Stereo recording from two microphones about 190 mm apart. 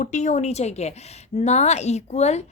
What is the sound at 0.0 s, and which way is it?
A woman's voice, 40° left (ahead or behind).